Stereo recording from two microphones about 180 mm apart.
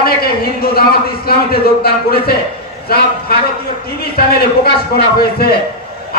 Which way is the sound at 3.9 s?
60° left (ahead or behind).